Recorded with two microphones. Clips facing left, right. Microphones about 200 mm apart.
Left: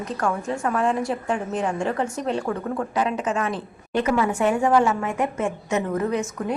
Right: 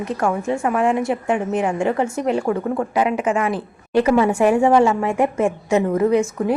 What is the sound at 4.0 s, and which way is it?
A woman's voice, 30° right (ahead or behind).